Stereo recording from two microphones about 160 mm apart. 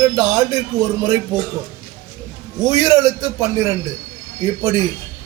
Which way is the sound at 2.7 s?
20° right (ahead or behind).